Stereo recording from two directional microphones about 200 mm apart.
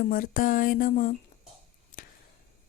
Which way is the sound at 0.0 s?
45° left (ahead or behind).